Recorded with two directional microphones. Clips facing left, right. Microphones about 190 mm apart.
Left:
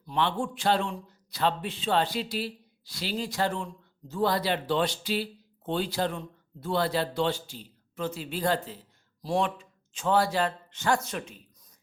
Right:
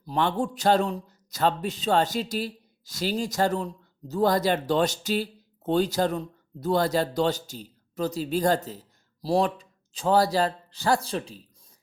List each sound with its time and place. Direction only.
0.0 s speech: 40° right (ahead or behind)